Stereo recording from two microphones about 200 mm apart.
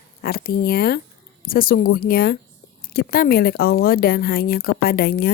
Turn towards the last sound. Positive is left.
turn(degrees=50)  # may be behind; listen again after turning